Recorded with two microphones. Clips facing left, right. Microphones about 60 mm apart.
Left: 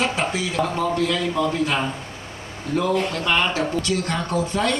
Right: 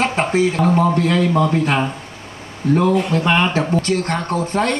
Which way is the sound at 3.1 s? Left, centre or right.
Right.